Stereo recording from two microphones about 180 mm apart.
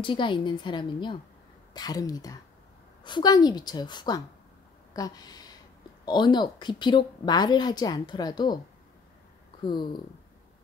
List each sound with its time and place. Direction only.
0.0 s a woman's voice: 25° left (ahead or behind)